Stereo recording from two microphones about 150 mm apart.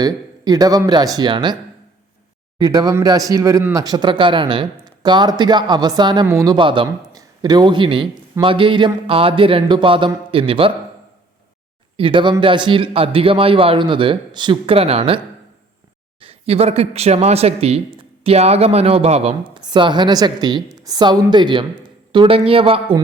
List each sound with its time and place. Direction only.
0.0 s speech: 25° right (ahead or behind)
2.6 s a man's voice: 25° right (ahead or behind)
11.9 s a man's voice: 35° right (ahead or behind)
16.2 s speech: 40° right (ahead or behind)
19.6 s speech: 30° right (ahead or behind)